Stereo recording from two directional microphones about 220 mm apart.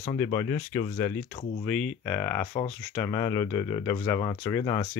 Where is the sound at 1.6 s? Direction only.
5° left (ahead or behind).